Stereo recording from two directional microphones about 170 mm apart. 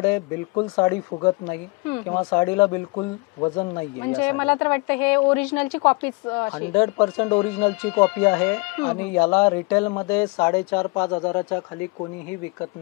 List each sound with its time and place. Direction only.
0.6 s speech: 25° left (ahead or behind); by 5.7 s 10° left (ahead or behind)
5.8 s speech: 25° left (ahead or behind)
10.3 s speech: 25° left (ahead or behind)